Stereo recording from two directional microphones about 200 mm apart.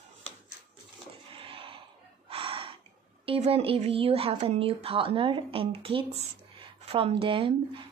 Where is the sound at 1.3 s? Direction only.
25° right (ahead or behind).